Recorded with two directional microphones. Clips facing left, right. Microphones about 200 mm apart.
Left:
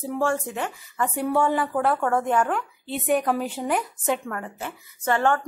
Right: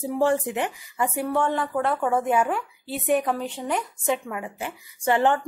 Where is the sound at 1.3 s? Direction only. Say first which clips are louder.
Left 4 dB; 5° left (ahead or behind).